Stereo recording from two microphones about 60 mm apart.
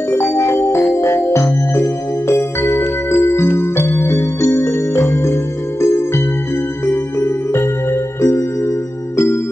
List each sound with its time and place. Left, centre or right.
0.1 s music: left